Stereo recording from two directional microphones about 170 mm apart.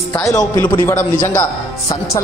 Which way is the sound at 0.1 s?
20° left (ahead or behind).